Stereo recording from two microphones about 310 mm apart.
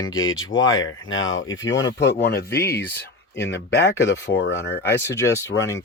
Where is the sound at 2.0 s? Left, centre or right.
Left.